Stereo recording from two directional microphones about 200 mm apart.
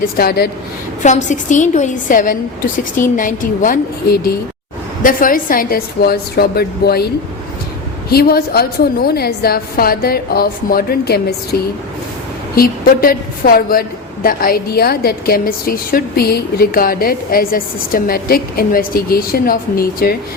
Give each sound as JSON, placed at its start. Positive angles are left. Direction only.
{"t": 0.2, "sound": "a woman's voice", "side_deg": 50}
{"t": 1.0, "sound": "a woman's voice", "side_deg": 35}
{"t": 8.1, "sound": "a woman's voice", "side_deg": 50}
{"t": 12.5, "sound": "a woman's voice", "side_deg": 45}